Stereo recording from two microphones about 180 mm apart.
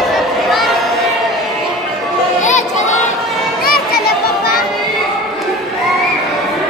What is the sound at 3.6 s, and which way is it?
Music, 55° left (ahead or behind).